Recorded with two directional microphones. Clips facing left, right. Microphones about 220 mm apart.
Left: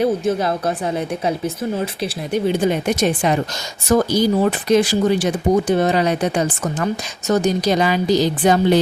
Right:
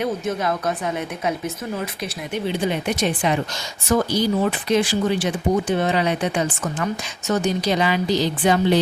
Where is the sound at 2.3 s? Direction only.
45° left (ahead or behind).